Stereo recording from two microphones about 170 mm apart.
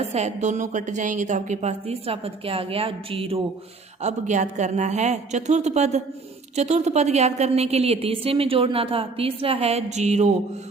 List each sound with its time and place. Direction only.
0.0 s a woman's voice: 40° right (ahead or behind)
4.0 s a woman's voice: 45° right (ahead or behind)